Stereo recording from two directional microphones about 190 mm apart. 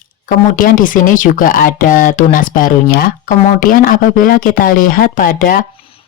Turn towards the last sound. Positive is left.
turn(degrees=30)  # may be behind; listen again after turning